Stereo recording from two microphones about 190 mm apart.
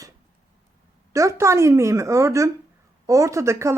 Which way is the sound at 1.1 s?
15° right (ahead or behind).